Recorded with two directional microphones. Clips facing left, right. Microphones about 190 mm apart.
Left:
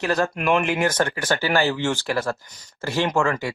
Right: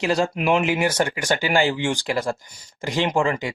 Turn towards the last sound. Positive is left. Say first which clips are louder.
# even
turn(degrees=-15)  # may be behind; listen again after turning